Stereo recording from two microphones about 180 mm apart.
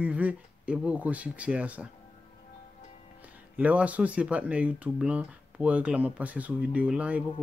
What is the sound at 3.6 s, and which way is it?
Speech, 5° right (ahead or behind).